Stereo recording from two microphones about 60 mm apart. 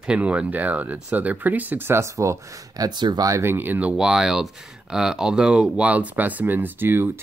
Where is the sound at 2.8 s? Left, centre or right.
Right.